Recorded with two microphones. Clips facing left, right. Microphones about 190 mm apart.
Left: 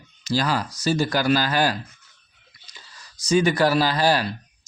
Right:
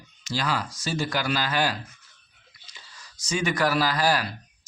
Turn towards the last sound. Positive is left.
turn(degrees=30)  # may be behind; listen again after turning